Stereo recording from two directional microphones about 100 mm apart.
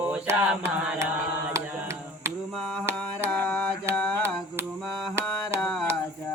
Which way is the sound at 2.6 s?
5° left (ahead or behind).